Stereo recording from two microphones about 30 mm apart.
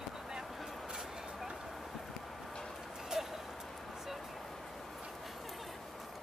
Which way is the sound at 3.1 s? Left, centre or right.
Centre.